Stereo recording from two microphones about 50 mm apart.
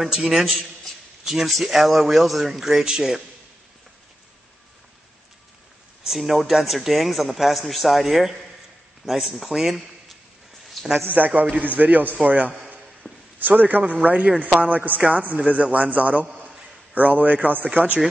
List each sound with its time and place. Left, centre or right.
0.0 s a man's voice: centre
6.0 s a man's voice: centre
11.1 s a man's voice: right
13.0 s a sound: left
13.4 s a man's voice: right